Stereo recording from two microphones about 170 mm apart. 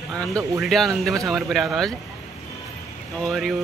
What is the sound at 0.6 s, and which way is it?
Speech, centre (ahead or behind).